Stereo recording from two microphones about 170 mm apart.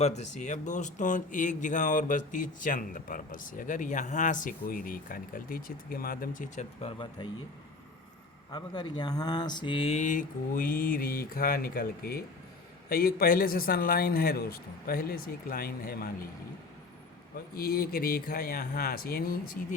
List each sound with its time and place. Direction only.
0.0 s speech: 40° left (ahead or behind)
6.8 s speech: 30° left (ahead or behind)
8.5 s a man's voice: 25° left (ahead or behind); by 16.1 s 60° left (ahead or behind)
17.6 s a man's voice: 65° left (ahead or behind)